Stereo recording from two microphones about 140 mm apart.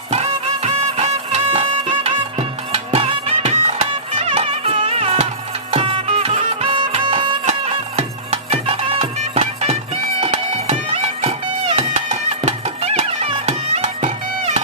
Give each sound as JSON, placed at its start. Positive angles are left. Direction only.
{"t": 0.1, "sound": "music", "side_deg": -50}
{"t": 7.4, "sound": "music", "side_deg": -50}